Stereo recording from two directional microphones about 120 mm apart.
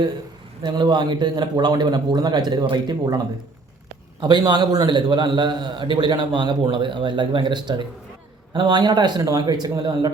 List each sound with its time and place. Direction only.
0.6 s a man's voice: 35° right (ahead or behind)
4.2 s a man's voice: 35° right (ahead or behind)